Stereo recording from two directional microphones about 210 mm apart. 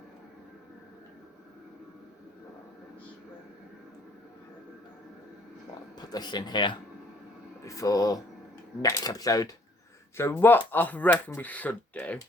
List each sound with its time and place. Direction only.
6.0 s speech: 20° left (ahead or behind)